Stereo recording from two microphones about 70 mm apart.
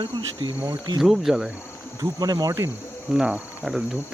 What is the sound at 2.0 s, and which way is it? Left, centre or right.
Cricket, right.